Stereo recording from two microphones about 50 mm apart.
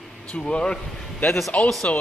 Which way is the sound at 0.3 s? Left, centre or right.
Centre.